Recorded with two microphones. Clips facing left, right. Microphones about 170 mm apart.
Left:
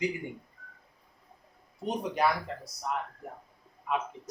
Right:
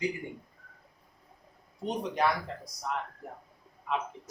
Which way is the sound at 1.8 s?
5° left (ahead or behind).